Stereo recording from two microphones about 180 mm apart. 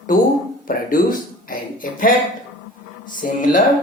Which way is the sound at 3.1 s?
50° left (ahead or behind).